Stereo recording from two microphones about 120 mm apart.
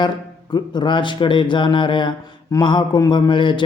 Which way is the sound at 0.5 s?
40° left (ahead or behind).